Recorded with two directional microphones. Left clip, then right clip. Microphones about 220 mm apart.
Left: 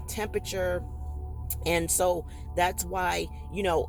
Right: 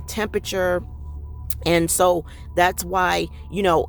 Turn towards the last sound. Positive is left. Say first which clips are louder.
# right 8 dB
turn(degrees=-40)  # may be behind; listen again after turning